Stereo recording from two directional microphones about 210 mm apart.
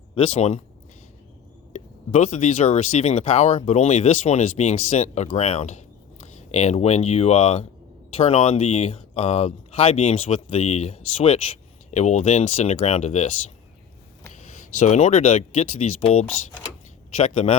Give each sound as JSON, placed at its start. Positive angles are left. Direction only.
{"t": 0.2, "sound": "speech", "side_deg": 30}
{"t": 1.7, "sound": "speech", "side_deg": 35}
{"t": 14.8, "sound": "speech", "side_deg": 30}
{"t": 17.2, "sound": "speech", "side_deg": 25}